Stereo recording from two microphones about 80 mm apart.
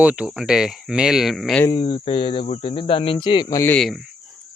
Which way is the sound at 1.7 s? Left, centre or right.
Left.